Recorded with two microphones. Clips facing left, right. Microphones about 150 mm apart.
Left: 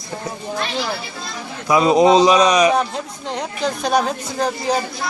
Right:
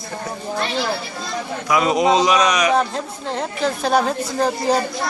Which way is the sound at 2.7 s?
Centre (ahead or behind).